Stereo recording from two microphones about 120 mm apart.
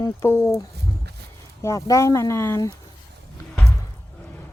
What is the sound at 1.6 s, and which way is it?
Speech, 25° left (ahead or behind).